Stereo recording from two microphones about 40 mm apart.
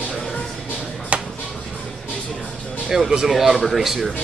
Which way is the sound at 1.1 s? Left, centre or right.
Right.